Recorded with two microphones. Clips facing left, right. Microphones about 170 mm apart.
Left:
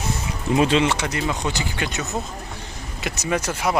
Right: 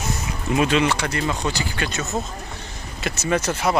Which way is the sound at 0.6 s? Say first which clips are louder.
Left 1 dB; 25° left (ahead or behind).